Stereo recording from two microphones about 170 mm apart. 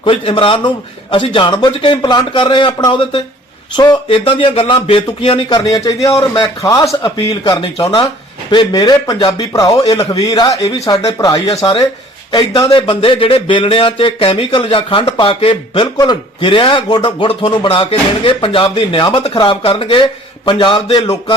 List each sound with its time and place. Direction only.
0.0 s speech: 30° left (ahead or behind)